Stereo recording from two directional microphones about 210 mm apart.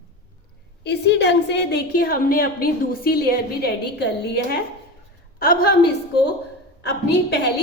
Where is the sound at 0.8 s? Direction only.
55° left (ahead or behind).